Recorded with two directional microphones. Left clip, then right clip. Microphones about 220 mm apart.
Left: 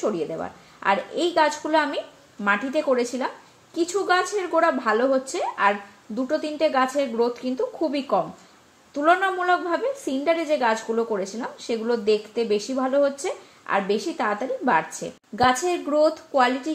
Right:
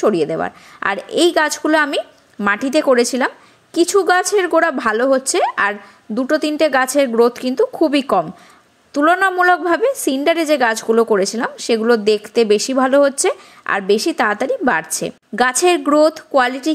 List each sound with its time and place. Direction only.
0.0 s a woman's voice: 40° right (ahead or behind)